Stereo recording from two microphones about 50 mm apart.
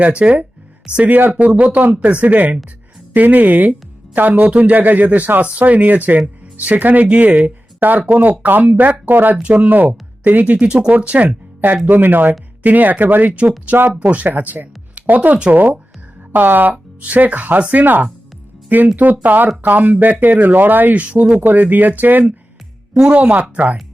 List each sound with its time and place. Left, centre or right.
0.0 s speech: right
1.0 s speech: right
1.3 s speech: right
9.4 s speech: right
20.9 s speech: right
23.0 s speech: right